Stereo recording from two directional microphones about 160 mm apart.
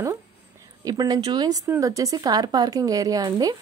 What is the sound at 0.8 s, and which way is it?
A woman's voice, 20° right (ahead or behind).